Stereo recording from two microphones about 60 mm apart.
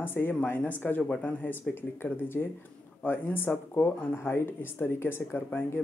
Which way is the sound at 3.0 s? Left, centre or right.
Left.